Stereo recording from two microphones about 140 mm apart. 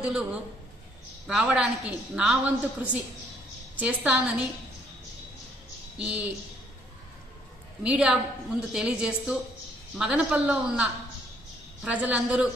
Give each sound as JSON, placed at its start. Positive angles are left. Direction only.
{"t": 0.0, "sound": "a woman's voice", "side_deg": -10}
{"t": 5.9, "sound": "a woman's voice", "side_deg": -10}
{"t": 7.8, "sound": "a woman's voice", "side_deg": -10}